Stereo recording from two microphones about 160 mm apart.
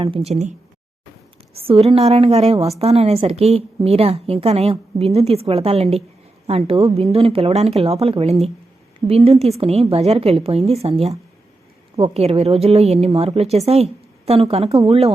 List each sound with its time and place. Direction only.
0.0 s a woman's voice: 35° right (ahead or behind)
1.5 s a woman's voice: 35° right (ahead or behind)